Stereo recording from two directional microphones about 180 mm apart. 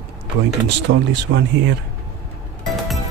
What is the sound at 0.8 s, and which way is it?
Speech, 85° right.